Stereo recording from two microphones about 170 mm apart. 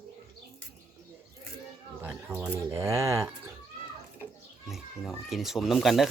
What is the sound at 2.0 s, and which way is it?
Speech, 10° right (ahead or behind).